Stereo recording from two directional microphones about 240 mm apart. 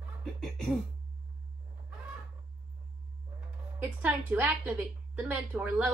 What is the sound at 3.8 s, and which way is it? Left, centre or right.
A woman's voice, centre.